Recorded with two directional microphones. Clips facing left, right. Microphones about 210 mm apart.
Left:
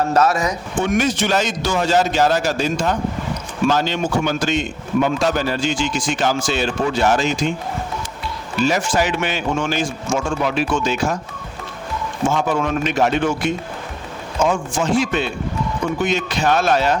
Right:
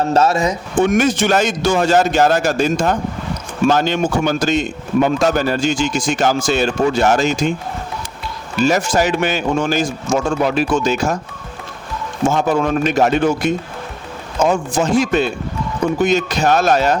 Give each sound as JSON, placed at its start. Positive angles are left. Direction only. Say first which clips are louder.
{"t": 0.1, "sound": "speech", "louder": "right 2 dB", "side_deg": -25}
{"t": 0.8, "sound": "a man's voice", "louder": "right 5 dB", "side_deg": -50}
{"t": 8.6, "sound": "a man's voice", "louder": "right 3 dB", "side_deg": -40}
{"t": 12.3, "sound": "a man's voice", "louder": "right 4 dB", "side_deg": -40}